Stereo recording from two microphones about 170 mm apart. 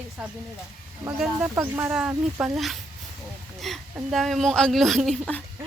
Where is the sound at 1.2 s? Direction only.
5° right (ahead or behind).